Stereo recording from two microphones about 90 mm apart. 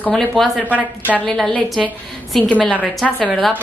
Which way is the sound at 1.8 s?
Centre (ahead or behind).